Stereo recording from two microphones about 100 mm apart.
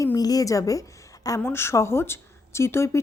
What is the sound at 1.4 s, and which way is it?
Speech, 25° left (ahead or behind).